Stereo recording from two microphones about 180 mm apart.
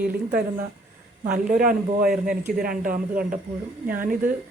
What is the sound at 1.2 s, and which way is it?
Speech, 45° right (ahead or behind).